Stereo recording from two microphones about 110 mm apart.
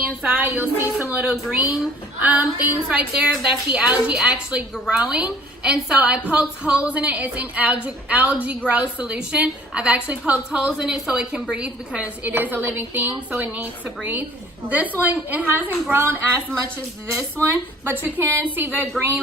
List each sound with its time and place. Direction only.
0.0 s a woman's voice: 10° right (ahead or behind)
17.4 s a woman's voice: 20° right (ahead or behind)